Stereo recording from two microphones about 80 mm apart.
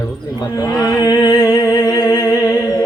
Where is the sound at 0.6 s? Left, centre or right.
Left.